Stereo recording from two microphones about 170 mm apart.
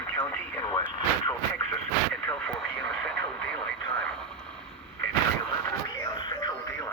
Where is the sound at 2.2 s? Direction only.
5° left (ahead or behind).